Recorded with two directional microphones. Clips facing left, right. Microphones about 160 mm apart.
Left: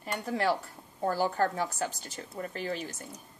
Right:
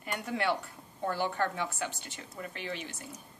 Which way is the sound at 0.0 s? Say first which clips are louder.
Left 3 dB; 35° left (ahead or behind).